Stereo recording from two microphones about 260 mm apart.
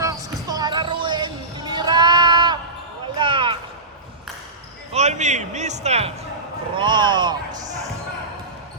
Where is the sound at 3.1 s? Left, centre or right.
Centre.